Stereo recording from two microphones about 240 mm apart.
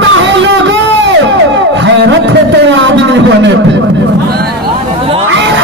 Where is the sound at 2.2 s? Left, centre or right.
Right.